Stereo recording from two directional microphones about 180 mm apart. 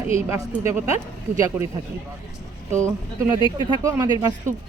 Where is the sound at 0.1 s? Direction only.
15° right (ahead or behind).